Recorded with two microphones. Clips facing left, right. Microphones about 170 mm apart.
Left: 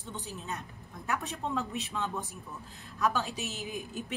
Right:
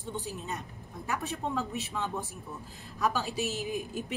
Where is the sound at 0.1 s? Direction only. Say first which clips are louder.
Right 4 dB; 40° right (ahead or behind).